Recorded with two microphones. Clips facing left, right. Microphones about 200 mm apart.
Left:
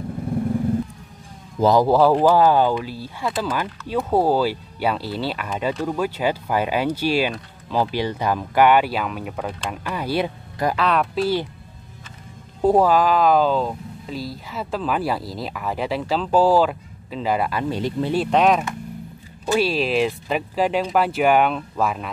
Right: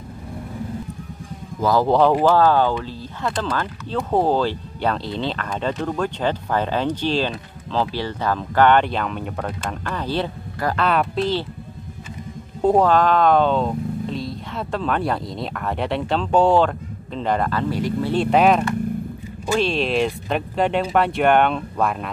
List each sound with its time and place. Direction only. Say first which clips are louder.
1.6 s speech: left 3 dB; 20° left (ahead or behind)
1.9 s speech: even; 5° left (ahead or behind)
10.8 s speech: right 2 dB; centre (ahead or behind)
12.6 s speech: even; 5° left (ahead or behind)
17.7 s speech: right 1 dB; 25° left (ahead or behind)
18.1 s speech: right 2 dB; centre (ahead or behind)